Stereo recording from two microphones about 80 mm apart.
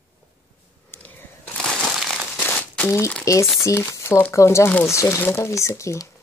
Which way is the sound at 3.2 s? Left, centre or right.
Left.